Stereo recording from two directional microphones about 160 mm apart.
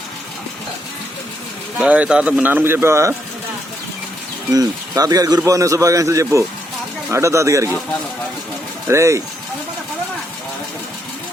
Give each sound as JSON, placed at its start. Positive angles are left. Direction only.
{"t": 1.8, "sound": "speech", "side_deg": -5}
{"t": 4.5, "sound": "a man's voice", "side_deg": -25}
{"t": 8.9, "sound": "speech", "side_deg": -20}